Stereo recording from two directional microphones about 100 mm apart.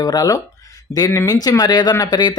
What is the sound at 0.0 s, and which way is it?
Speech, 40° left (ahead or behind).